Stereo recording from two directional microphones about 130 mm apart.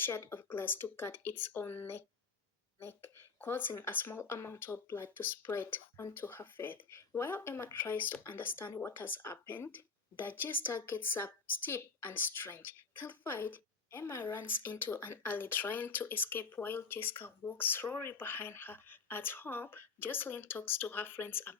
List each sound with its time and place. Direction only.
0.0 s speech: 20° left (ahead or behind)